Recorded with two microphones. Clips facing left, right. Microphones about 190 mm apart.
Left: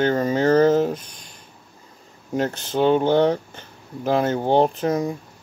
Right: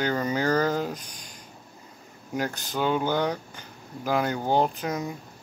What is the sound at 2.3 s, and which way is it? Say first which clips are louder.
Speech: left 7 dB; 25° left (ahead or behind).